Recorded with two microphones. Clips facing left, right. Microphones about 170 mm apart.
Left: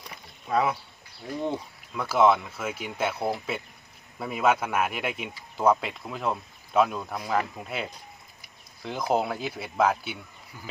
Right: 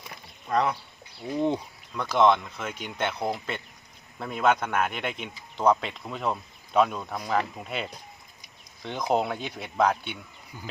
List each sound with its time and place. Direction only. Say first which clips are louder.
0.0 s a sound: even; 5° left (ahead or behind)
1.3 s speech: right 4 dB; 15° right (ahead or behind)
1.9 s speech: even; 5° left (ahead or behind)